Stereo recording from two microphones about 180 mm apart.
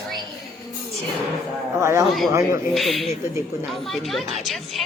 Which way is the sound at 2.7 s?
Centre (ahead or behind).